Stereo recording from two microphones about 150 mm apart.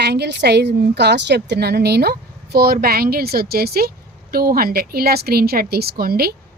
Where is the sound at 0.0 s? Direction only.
90° right.